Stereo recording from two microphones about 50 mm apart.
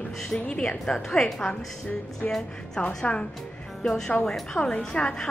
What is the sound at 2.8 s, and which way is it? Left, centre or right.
Speech, left.